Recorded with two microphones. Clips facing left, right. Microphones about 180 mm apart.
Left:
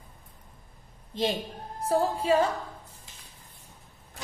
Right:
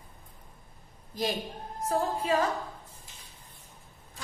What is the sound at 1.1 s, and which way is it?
Speech, 25° left (ahead or behind).